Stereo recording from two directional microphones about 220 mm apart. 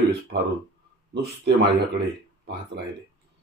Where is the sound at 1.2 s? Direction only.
50° right (ahead or behind).